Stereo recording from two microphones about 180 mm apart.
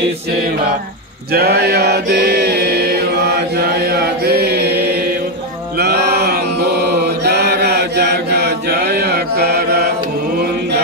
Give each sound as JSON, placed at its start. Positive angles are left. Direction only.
{"t": 1.3, "sound": "chant", "side_deg": -60}
{"t": 5.8, "sound": "mantra", "side_deg": -65}